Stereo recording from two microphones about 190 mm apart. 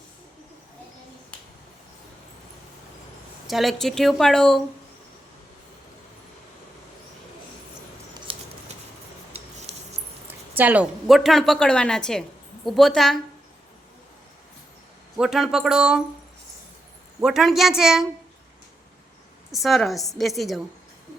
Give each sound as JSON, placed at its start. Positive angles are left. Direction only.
{"t": 3.4, "sound": "speech", "side_deg": 0}
{"t": 8.3, "sound": "a sound", "side_deg": -30}
{"t": 9.3, "sound": "rub", "side_deg": -35}
{"t": 10.2, "sound": "a sound", "side_deg": -10}
{"t": 11.0, "sound": "speech", "side_deg": 0}
{"t": 15.2, "sound": "speech", "side_deg": 0}
{"t": 17.2, "sound": "speech", "side_deg": 0}
{"t": 19.5, "sound": "speech", "side_deg": 0}